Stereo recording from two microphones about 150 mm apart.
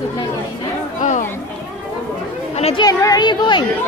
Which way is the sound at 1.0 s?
55° left (ahead or behind).